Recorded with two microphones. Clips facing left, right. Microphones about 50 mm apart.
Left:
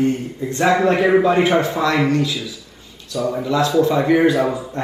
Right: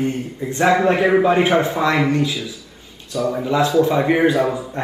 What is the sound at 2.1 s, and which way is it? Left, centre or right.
Speech, right.